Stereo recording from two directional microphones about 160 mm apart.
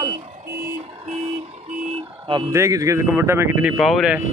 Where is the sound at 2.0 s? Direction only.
35° right (ahead or behind).